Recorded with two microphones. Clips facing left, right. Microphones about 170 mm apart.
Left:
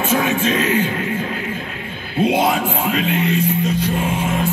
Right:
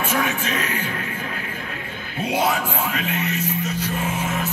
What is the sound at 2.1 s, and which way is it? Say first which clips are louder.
Speech: left 6 dB; 25° left (ahead or behind).